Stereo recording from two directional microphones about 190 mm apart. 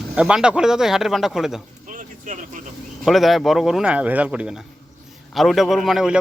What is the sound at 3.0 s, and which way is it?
Speech, centre (ahead or behind).